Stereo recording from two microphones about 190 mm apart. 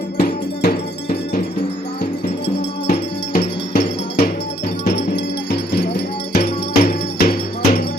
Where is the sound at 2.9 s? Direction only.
50° left (ahead or behind).